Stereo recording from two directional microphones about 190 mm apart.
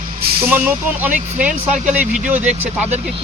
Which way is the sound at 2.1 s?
40° right (ahead or behind).